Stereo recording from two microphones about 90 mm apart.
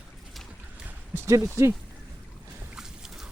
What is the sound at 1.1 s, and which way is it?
Speech, 25° right (ahead or behind).